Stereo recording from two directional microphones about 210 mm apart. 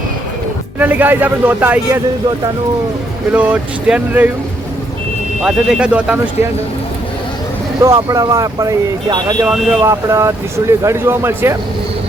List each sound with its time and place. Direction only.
0.8 s speech: 10° right (ahead or behind)
3.3 s speech: 5° right (ahead or behind)
5.4 s speech: centre (ahead or behind)
7.9 s speech: 15° right (ahead or behind)
9.5 s speech: 5° right (ahead or behind)